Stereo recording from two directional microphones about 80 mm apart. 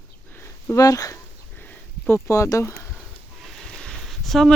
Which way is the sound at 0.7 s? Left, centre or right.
Left.